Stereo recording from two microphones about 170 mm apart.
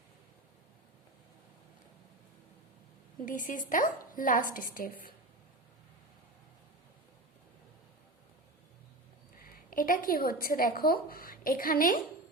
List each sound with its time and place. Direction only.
3.2 s a woman's voice: 50° left (ahead or behind)
9.4 s a woman's voice: 55° left (ahead or behind)